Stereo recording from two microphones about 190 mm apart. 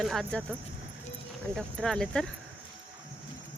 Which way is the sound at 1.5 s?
5° left (ahead or behind).